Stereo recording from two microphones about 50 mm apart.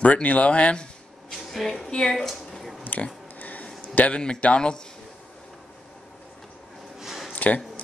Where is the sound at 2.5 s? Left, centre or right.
Centre.